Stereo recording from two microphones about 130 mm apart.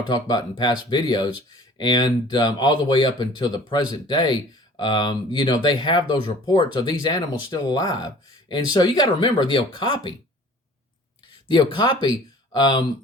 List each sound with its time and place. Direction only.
0.1 s speech: 35° left (ahead or behind)
11.5 s speech: 35° left (ahead or behind)